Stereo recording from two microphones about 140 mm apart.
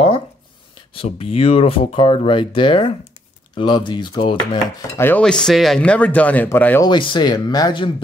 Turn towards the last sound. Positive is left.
turn(degrees=30)  # may be behind; listen again after turning